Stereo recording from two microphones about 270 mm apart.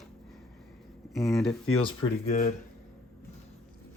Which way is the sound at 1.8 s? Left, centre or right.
Centre.